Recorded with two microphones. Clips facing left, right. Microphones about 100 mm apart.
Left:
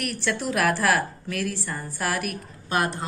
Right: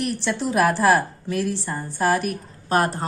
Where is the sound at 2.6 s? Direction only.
40° right (ahead or behind).